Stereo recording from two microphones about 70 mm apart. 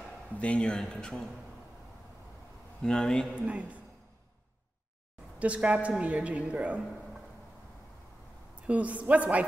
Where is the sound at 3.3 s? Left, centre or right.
Centre.